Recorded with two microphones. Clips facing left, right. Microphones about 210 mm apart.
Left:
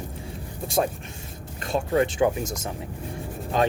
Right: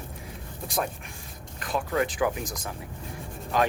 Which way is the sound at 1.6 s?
25° left (ahead or behind).